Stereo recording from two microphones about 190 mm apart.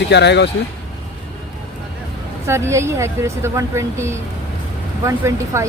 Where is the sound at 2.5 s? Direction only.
15° right (ahead or behind).